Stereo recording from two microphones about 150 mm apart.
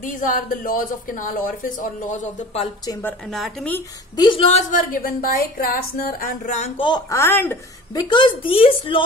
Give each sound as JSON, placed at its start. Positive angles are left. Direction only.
{"t": 0.0, "sound": "speech", "side_deg": 60}
{"t": 3.0, "sound": "speech", "side_deg": 15}
{"t": 3.3, "sound": "speech", "side_deg": 0}
{"t": 4.2, "sound": "speech", "side_deg": 35}
{"t": 7.1, "sound": "speech", "side_deg": 15}
{"t": 7.9, "sound": "a woman's voice", "side_deg": 30}